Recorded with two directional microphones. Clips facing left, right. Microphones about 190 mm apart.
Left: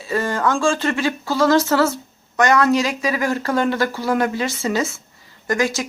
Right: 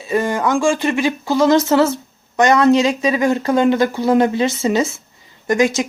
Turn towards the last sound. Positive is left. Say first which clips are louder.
# right 5 dB
turn(degrees=-20)  # may be behind; listen again after turning